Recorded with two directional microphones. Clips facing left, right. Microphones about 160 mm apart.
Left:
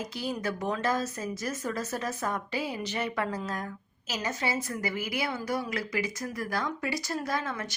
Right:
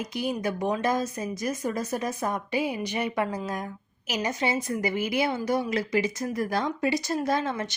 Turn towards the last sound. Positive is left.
turn(degrees=-25)  # may be behind; listen again after turning